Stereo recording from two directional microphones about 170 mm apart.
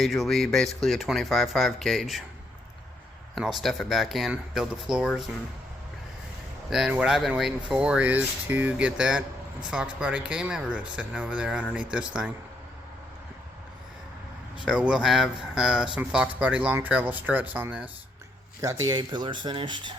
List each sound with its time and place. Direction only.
0.0 s speech: centre (ahead or behind)
3.3 s speech: centre (ahead or behind)
6.7 s speech: 5° right (ahead or behind)
14.6 s speech: 5° right (ahead or behind); by 19.9 s 25° right (ahead or behind)